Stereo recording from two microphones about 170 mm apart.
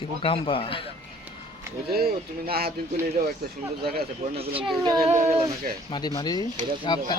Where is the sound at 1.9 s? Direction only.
65° right (ahead or behind).